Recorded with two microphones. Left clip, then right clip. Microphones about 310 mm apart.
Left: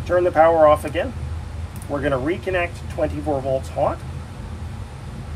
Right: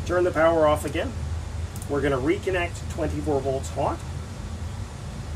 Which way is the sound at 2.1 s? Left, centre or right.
Centre.